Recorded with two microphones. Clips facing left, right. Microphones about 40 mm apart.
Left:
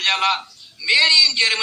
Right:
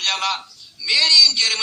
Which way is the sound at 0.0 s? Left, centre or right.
Left.